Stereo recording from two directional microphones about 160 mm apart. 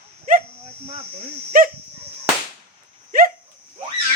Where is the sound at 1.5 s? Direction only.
65° right (ahead or behind).